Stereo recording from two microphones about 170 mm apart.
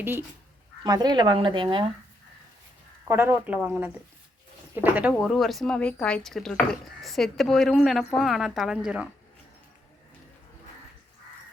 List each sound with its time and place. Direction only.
0.0 s speech: 15° right (ahead or behind)
0.9 s speech: 25° right (ahead or behind)
3.1 s speech: 15° right (ahead or behind)